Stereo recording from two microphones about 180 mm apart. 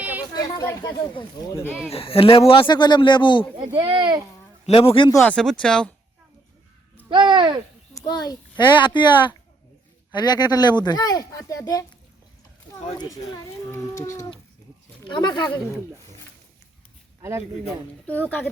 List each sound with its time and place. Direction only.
0.0 s a sound: 10° right (ahead or behind)
0.3 s speech: 20° left (ahead or behind)
1.9 s speech: 30° left (ahead or behind)
3.8 s speech: 25° right (ahead or behind)
4.6 s speech: 30° left (ahead or behind)
5.1 s speech: 5° left (ahead or behind)
7.1 s speech: 25° right (ahead or behind)
7.9 s speech: 20° left (ahead or behind)
13.0 s speech: 20° left (ahead or behind)
18.0 s a woman's voice: 10° left (ahead or behind)